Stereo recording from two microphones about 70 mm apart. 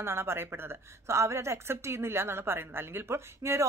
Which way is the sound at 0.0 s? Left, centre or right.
Right.